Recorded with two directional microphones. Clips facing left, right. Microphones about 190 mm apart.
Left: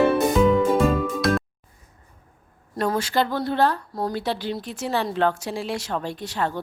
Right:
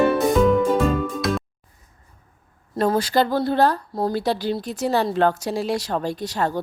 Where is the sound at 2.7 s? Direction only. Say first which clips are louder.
Right 3 dB; 35° right (ahead or behind).